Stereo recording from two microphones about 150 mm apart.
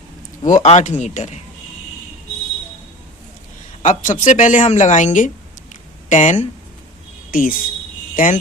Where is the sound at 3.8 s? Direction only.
55° left (ahead or behind).